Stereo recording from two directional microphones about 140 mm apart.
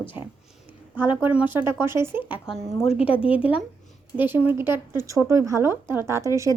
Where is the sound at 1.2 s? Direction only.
10° right (ahead or behind).